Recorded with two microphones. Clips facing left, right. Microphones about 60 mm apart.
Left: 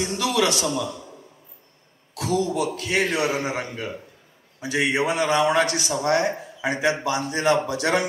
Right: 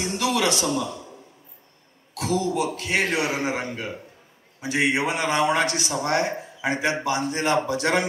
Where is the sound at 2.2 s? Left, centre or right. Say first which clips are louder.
Left 1 dB; right.